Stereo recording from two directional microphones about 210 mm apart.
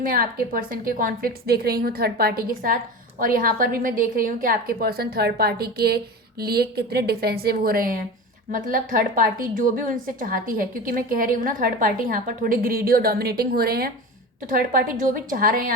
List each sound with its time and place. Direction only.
0.1 s a woman's voice: 45° right (ahead or behind)